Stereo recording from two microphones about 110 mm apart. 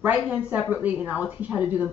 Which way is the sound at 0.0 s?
15° right (ahead or behind).